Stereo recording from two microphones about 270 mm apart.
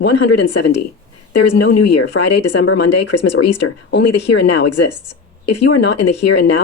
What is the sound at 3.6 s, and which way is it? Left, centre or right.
Speech, left.